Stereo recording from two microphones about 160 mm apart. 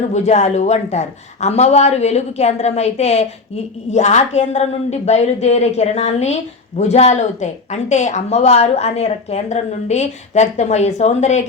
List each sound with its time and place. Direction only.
0.1 s speech: 45° left (ahead or behind)